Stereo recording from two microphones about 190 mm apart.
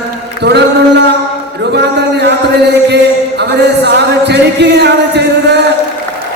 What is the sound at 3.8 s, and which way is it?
Music, 60° right (ahead or behind).